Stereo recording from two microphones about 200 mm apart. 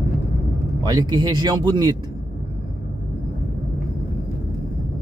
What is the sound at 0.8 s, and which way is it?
Speech, 20° right (ahead or behind).